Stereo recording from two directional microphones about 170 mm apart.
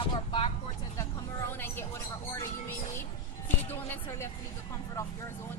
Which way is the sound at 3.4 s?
10° left (ahead or behind).